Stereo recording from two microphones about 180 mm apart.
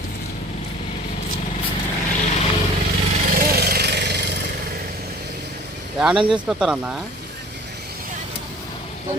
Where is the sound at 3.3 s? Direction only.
60° right (ahead or behind).